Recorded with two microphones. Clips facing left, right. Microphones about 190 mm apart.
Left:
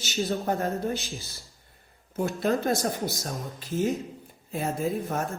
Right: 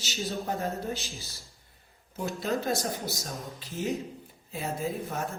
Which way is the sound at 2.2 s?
55° left (ahead or behind).